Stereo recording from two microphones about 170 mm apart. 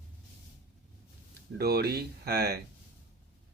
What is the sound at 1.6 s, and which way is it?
Speech, 65° right (ahead or behind).